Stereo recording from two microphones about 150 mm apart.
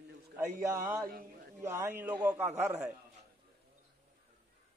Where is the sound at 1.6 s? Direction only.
15° right (ahead or behind).